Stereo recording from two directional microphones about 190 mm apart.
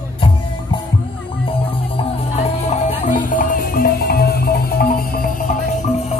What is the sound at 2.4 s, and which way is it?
Music, 35° left (ahead or behind).